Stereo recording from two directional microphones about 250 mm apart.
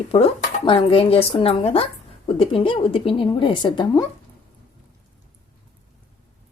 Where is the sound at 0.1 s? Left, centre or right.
Left.